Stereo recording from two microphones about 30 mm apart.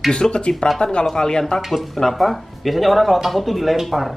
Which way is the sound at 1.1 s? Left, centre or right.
Left.